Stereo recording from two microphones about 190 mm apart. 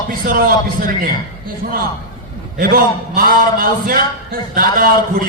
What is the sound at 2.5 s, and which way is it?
A man's voice, 50° right (ahead or behind).